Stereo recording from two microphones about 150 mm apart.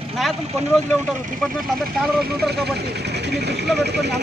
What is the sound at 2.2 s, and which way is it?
Speech, 90° right.